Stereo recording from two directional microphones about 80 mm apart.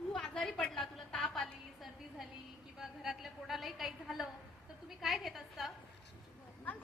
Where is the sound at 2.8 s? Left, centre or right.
Centre.